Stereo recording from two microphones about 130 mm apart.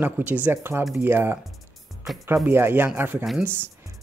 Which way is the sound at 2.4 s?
15° right (ahead or behind).